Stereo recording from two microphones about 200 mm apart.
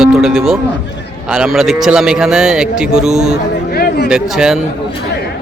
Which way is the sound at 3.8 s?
50° left (ahead or behind).